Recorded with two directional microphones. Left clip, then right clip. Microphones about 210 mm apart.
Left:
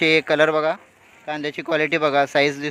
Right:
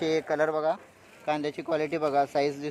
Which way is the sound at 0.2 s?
35° left (ahead or behind).